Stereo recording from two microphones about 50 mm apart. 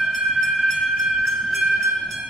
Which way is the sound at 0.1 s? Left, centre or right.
Centre.